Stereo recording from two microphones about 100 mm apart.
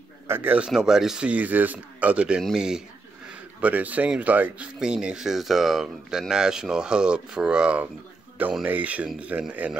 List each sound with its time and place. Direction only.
0.3 s speech: 20° right (ahead or behind)
0.7 s speech: 5° right (ahead or behind)